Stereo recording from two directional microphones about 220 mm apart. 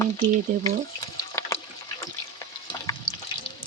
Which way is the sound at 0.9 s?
15° left (ahead or behind).